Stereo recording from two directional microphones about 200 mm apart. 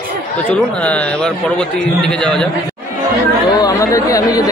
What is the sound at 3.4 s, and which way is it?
Speech, 20° left (ahead or behind).